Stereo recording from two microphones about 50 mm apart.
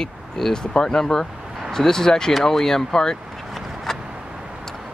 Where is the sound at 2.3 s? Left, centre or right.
Centre.